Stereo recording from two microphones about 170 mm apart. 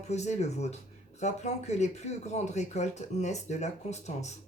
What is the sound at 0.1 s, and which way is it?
Speech, 40° left (ahead or behind).